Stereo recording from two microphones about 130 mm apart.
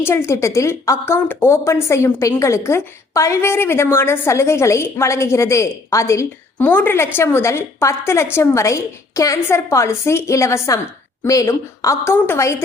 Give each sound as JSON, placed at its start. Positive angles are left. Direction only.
{"t": 0.0, "sound": "a woman's voice", "side_deg": 20}